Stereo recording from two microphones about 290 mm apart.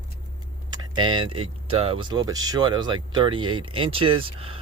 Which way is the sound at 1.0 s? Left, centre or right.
Centre.